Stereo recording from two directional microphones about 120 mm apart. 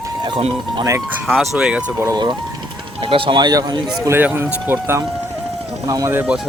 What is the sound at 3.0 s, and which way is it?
Speech, 45° right (ahead or behind).